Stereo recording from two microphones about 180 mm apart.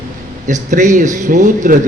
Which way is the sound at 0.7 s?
45° right (ahead or behind).